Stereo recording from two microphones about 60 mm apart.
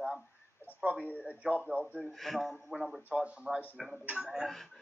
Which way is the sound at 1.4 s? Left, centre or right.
Right.